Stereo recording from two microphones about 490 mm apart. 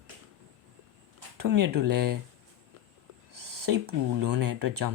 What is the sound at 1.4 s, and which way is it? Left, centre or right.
Speech, right.